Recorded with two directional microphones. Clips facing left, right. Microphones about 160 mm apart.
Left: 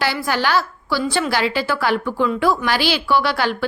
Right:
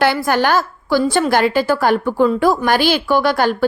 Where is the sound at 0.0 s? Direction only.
50° right (ahead or behind).